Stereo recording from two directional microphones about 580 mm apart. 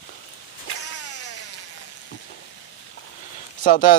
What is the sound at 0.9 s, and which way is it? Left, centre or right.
Vehicle, left.